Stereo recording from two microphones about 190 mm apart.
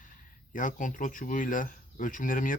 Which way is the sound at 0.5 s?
45° left (ahead or behind).